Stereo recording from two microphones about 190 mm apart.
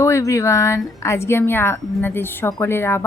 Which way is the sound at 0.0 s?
15° left (ahead or behind).